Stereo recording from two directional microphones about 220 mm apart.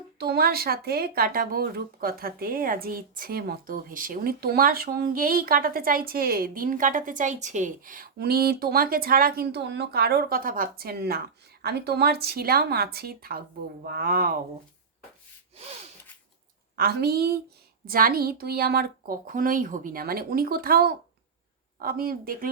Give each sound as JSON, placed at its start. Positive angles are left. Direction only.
{"t": 0.2, "sound": "speech", "side_deg": -45}
{"t": 16.7, "sound": "a woman's voice", "side_deg": -45}